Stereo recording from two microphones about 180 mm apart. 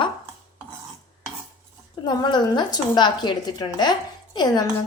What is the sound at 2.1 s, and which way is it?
A woman's voice, 25° left (ahead or behind).